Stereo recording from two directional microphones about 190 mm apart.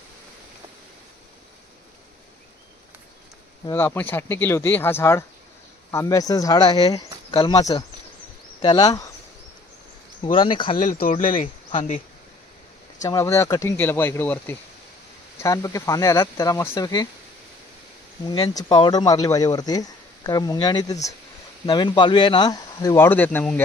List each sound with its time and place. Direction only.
3.7 s speech: 10° left (ahead or behind)
10.3 s speech: 25° left (ahead or behind)
13.0 s speech: 15° left (ahead or behind)
18.3 s speech: 20° left (ahead or behind)